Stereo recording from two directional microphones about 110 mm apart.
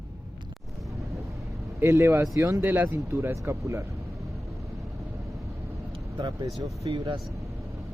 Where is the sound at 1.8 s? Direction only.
25° right (ahead or behind).